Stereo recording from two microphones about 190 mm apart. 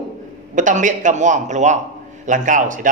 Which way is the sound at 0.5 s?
40° right (ahead or behind).